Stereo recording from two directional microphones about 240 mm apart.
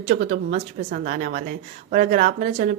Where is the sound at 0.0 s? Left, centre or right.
Right.